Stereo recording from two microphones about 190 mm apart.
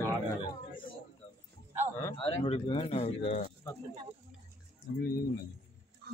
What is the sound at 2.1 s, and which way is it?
Speech, 30° left (ahead or behind).